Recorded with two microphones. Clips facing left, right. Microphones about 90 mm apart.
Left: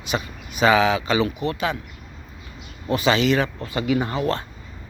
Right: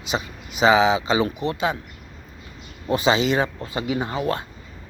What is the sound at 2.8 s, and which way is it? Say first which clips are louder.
Speech: even; 25° right (ahead or behind).